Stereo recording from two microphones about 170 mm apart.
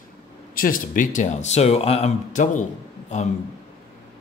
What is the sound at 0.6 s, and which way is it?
Speech, 50° left (ahead or behind).